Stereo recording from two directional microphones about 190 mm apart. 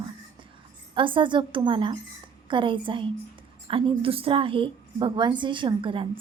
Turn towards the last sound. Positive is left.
turn(degrees=-25)  # may be behind; listen again after turning